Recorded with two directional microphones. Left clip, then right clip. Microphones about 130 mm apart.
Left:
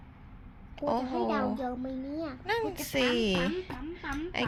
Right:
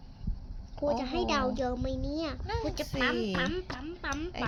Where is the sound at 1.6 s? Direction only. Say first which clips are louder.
Right 2 dB; 65° right (ahead or behind).